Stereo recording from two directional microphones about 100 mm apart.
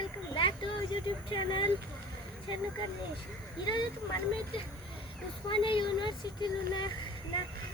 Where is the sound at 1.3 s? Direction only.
55° left (ahead or behind).